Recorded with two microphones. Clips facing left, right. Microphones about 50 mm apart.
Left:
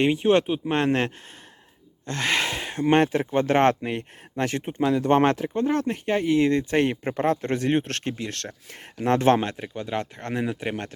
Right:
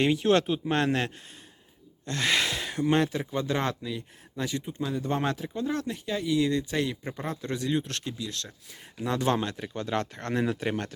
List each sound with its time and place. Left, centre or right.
0.0 s speech: left